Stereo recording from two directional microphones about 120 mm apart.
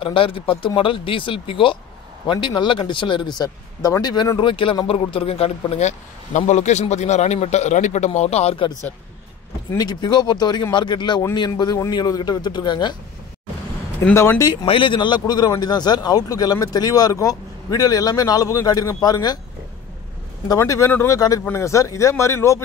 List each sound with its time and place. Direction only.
0.0 s speech: 45° left (ahead or behind)
5.8 s a man's voice: 70° left (ahead or behind)
9.8 s speech: 35° left (ahead or behind)
14.1 s speech: 20° left (ahead or behind)
14.5 s speech: 40° left (ahead or behind)
20.4 s speech: 25° left (ahead or behind)